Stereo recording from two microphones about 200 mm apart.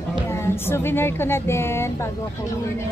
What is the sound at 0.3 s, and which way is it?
Speech, 10° left (ahead or behind).